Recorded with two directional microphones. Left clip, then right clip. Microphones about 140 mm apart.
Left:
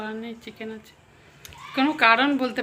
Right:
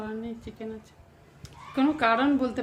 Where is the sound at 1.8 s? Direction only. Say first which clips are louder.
Left 5 dB; 5° right (ahead or behind).